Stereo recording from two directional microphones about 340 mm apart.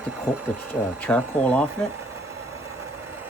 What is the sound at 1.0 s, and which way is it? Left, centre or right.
Speech, centre.